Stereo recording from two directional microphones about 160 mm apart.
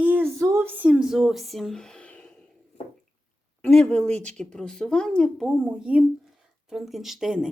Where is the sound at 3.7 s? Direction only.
5° left (ahead or behind).